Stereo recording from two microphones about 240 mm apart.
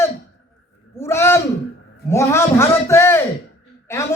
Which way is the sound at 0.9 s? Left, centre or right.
Centre.